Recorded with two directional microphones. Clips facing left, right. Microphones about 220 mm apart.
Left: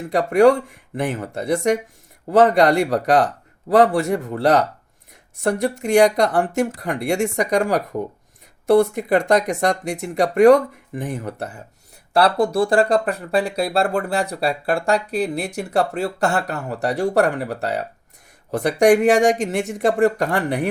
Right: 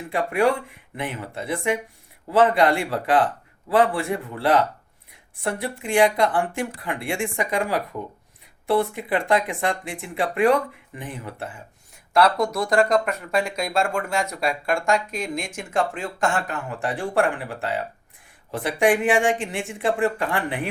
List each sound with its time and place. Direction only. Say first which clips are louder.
0.1 s speech: left 7 dB; 40° left (ahead or behind)
12.1 s speech: left 3 dB; 30° left (ahead or behind)